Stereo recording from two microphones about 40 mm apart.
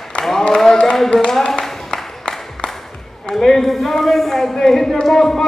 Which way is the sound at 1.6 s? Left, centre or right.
Centre.